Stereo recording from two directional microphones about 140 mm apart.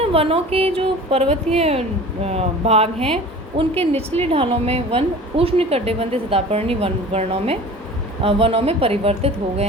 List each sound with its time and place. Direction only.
0.0 s a woman's voice: 45° right (ahead or behind)